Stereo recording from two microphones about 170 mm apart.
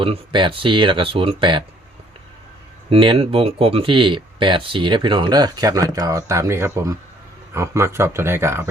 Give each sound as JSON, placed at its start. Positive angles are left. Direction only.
{"t": 0.0, "sound": "speech", "side_deg": -30}
{"t": 2.9, "sound": "speech", "side_deg": -30}